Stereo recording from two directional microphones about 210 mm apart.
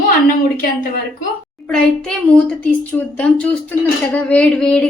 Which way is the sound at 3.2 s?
5° left (ahead or behind).